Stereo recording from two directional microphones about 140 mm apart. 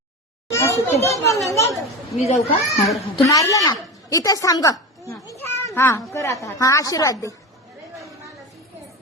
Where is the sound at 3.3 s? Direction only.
25° left (ahead or behind).